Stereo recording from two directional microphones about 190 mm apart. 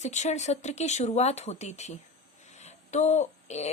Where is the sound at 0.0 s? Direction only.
35° left (ahead or behind).